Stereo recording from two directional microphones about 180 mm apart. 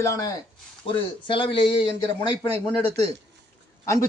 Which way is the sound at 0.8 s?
30° left (ahead or behind).